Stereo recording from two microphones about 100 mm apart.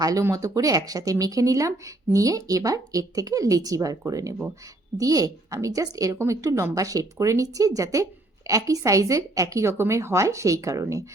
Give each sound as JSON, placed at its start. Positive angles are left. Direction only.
{"t": 0.0, "sound": "a woman's voice", "side_deg": -35}